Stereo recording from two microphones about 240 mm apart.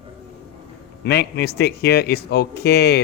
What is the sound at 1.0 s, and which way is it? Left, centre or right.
Speech, left.